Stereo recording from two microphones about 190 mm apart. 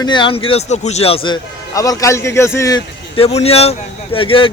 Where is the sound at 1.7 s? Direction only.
20° left (ahead or behind).